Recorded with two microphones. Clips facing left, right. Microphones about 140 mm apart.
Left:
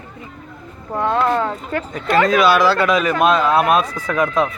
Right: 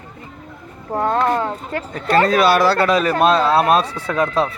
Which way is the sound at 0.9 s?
40° right (ahead or behind).